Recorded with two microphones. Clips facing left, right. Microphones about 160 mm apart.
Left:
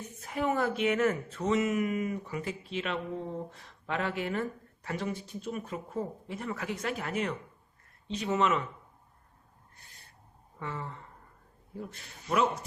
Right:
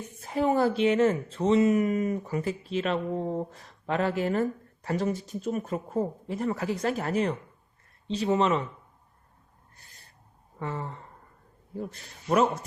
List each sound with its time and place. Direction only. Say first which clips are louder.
0.3 s speech: right 5 dB; 30° right (ahead or behind)
10.6 s speech: right 4 dB; 40° right (ahead or behind)